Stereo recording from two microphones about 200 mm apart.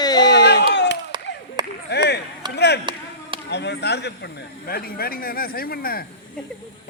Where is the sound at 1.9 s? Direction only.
55° left (ahead or behind).